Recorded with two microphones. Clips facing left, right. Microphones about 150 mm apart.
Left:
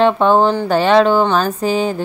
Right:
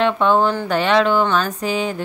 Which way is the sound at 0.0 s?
35° left (ahead or behind).